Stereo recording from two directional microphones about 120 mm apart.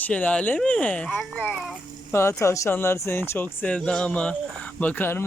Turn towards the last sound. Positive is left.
turn(degrees=20)  # may be behind; listen again after turning